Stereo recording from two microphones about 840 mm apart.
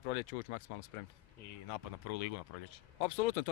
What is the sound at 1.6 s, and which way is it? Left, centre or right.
Speech, left.